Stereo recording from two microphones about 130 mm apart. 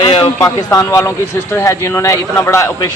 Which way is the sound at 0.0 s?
40° left (ahead or behind).